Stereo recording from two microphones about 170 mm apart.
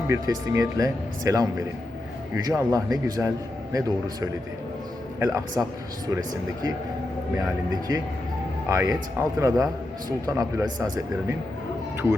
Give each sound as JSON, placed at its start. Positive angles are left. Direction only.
{"t": 0.1, "sound": "a man's voice", "side_deg": -20}